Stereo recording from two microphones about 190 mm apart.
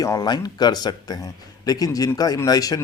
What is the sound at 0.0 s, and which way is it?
Speech, 20° left (ahead or behind).